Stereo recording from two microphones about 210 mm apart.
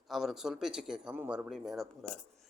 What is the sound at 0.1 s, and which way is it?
Speech, centre (ahead or behind).